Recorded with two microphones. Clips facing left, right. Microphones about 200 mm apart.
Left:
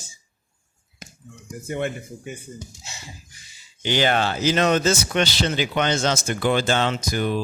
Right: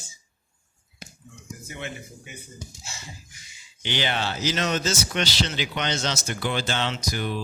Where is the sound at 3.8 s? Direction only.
45° left (ahead or behind).